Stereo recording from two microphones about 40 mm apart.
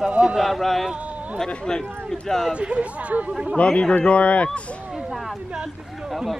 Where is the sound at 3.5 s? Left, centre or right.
Left.